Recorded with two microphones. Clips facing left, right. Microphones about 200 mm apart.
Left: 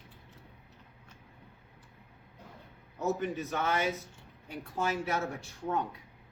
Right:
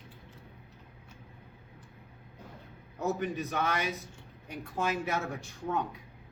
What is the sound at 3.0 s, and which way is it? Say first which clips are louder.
A man's voice: even; 15° right (ahead or behind).